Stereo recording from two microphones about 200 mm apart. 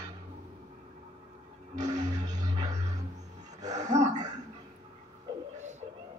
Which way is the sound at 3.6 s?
20° right (ahead or behind).